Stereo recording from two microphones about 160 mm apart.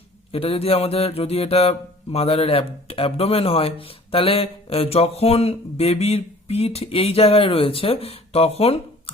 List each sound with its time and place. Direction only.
0.3 s speech: 35° left (ahead or behind)